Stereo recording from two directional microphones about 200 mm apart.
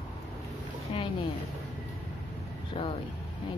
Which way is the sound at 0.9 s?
25° left (ahead or behind).